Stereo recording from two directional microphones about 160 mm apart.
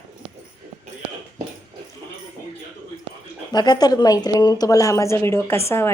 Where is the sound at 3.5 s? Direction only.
25° left (ahead or behind).